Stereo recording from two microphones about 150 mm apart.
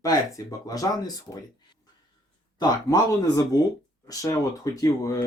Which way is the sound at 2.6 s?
25° left (ahead or behind).